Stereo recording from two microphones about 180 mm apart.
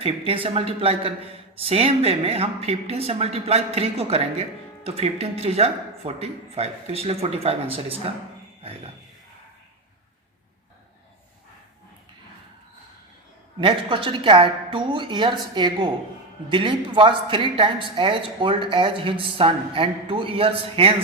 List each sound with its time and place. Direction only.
0.0 s speech: 30° right (ahead or behind)
13.6 s a woman's voice: 25° right (ahead or behind)